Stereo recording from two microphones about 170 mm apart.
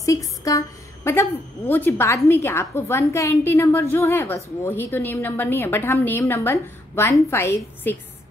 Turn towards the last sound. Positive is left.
turn(degrees=15)  # may be behind; listen again after turning